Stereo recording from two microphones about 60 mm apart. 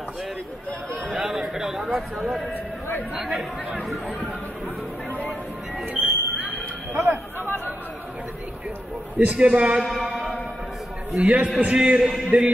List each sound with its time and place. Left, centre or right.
1.1 s a man's voice: centre
5.9 s a sound: centre
6.9 s speech: right
7.3 s speech: left
9.2 s a man's voice: right
9.8 s speech: centre
11.1 s a man's voice: right